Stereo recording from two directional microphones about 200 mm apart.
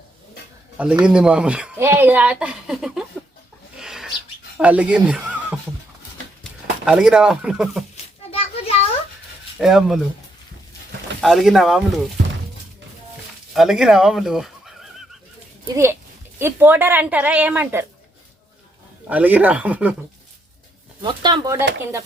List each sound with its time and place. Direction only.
0.8 s speech: 5° right (ahead or behind)
3.8 s a sound: centre (ahead or behind)
4.5 s speech: 5° right (ahead or behind)
8.3 s a sound: 30° left (ahead or behind)
9.6 s speech: centre (ahead or behind)
11.2 s speech: centre (ahead or behind)
13.5 s speech: centre (ahead or behind)
15.6 s a woman's voice: 15° right (ahead or behind)
19.0 s a woman's voice: 5° right (ahead or behind)
21.0 s speech: 25° right (ahead or behind)